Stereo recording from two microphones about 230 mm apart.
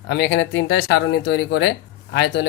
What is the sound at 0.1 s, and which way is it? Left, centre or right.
Speech, left.